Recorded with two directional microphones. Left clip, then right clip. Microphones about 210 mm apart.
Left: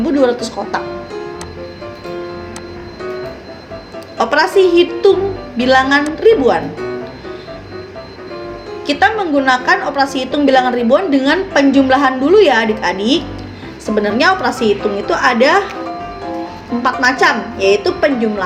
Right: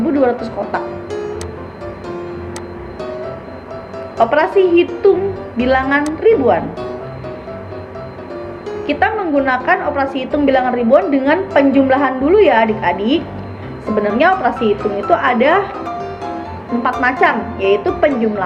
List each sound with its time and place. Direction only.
0.2 s a woman's voice: 35° left (ahead or behind)
4.2 s a woman's voice: 35° left (ahead or behind)
8.9 s a woman's voice: 35° left (ahead or behind)
16.8 s a woman's voice: 35° left (ahead or behind)